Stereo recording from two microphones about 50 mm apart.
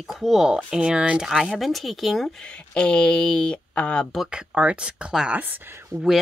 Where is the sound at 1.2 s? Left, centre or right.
Centre.